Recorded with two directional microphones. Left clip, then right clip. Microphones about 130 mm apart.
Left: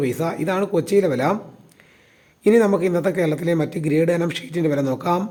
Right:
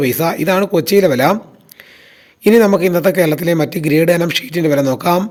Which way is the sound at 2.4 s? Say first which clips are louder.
Right 6 dB; 25° right (ahead or behind).